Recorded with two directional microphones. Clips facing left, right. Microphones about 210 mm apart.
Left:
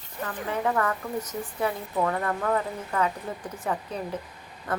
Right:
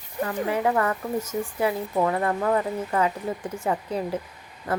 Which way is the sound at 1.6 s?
25° right (ahead or behind).